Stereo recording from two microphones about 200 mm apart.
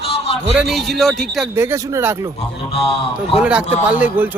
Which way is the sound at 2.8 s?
30° left (ahead or behind).